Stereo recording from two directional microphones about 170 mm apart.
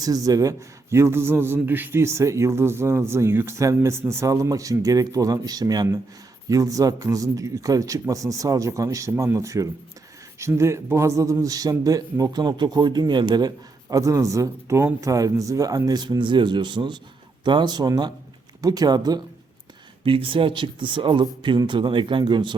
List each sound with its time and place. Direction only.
0.0 s a man's voice: 20° right (ahead or behind)